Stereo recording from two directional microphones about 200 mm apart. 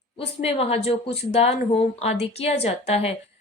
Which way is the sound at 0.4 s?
30° left (ahead or behind).